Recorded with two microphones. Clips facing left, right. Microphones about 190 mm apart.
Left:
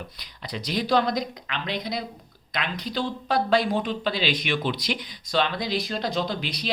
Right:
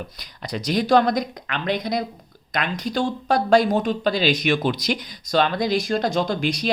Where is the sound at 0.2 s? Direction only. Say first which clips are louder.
Right 6 dB; 45° right (ahead or behind).